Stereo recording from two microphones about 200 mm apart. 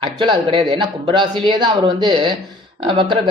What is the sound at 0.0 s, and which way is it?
Speech, 25° right (ahead or behind).